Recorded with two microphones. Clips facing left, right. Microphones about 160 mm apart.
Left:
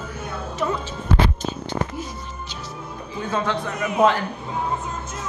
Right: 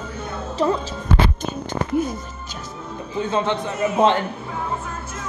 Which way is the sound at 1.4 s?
55° right (ahead or behind).